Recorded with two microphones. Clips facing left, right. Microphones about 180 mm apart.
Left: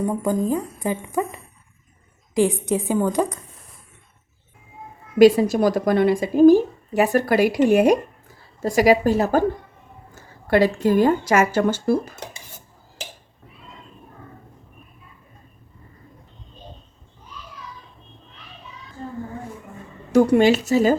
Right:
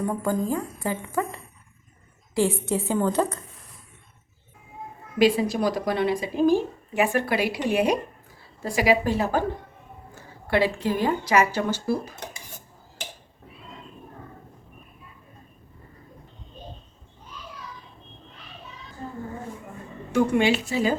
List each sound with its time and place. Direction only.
0.1 s a woman's voice: 20° left (ahead or behind)
5.2 s a woman's voice: 45° left (ahead or behind)
20.1 s speech: 40° left (ahead or behind)